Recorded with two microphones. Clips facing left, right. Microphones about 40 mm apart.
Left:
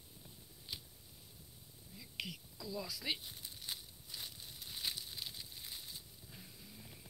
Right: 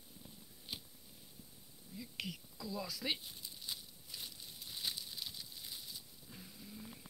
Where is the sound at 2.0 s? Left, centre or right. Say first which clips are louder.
Right 1 dB; centre.